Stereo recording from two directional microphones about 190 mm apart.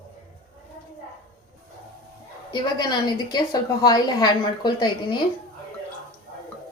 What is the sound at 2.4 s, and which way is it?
A woman's voice, 25° left (ahead or behind).